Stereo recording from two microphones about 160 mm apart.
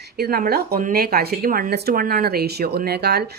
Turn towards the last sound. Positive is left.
turn(degrees=-90)